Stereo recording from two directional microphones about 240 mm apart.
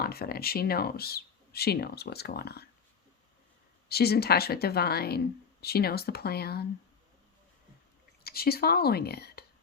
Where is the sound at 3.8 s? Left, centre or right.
Left.